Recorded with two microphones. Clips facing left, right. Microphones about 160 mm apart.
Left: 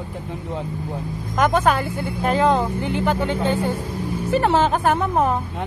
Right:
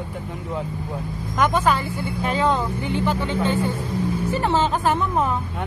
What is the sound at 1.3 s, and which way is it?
Speech, 50° left (ahead or behind).